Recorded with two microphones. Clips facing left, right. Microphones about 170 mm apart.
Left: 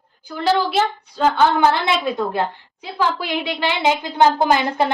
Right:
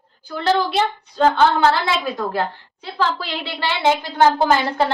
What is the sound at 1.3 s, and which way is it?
A woman's voice, 15° left (ahead or behind).